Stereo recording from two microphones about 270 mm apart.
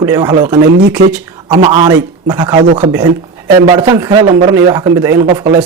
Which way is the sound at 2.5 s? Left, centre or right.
Right.